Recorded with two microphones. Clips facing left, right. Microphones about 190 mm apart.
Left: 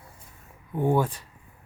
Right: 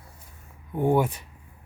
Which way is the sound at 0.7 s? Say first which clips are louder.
Right 1 dB; 20° right (ahead or behind).